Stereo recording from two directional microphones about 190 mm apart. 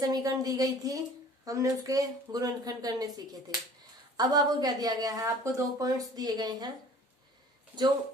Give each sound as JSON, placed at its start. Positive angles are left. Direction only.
{"t": 0.0, "sound": "a woman's voice", "side_deg": -20}